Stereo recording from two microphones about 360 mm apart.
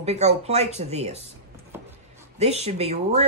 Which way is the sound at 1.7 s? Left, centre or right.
Centre.